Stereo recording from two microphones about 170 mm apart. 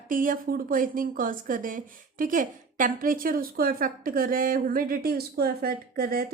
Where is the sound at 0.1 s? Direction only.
55° right (ahead or behind).